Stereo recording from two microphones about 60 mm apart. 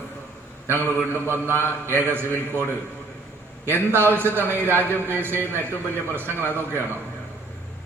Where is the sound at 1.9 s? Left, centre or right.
Right.